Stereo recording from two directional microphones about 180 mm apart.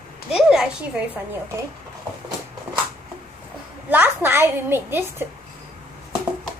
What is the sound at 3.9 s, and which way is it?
A woman's voice, 10° right (ahead or behind).